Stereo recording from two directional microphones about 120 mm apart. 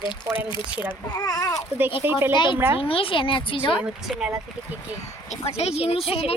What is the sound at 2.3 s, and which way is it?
A woman's voice, 40° left (ahead or behind).